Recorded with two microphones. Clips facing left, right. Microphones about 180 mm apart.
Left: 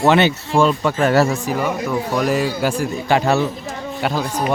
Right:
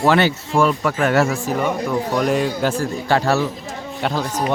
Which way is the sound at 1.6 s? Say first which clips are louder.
Even; 5° left (ahead or behind).